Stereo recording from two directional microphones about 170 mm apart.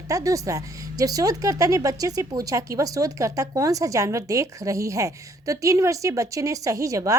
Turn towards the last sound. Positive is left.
turn(degrees=-20)  # may be behind; listen again after turning